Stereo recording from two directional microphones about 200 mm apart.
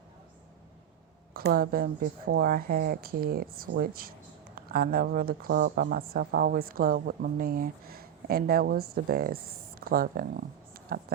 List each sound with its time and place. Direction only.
1.3 s speech: 50° right (ahead or behind)